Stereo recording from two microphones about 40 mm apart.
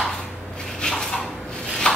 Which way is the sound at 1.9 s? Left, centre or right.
Left.